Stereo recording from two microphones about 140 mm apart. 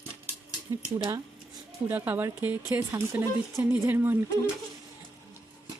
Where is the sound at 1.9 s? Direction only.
15° right (ahead or behind).